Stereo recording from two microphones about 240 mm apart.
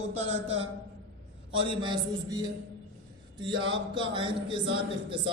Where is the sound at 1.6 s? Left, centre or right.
Centre.